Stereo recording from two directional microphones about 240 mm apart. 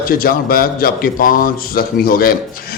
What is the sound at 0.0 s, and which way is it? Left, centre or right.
A man's voice, left.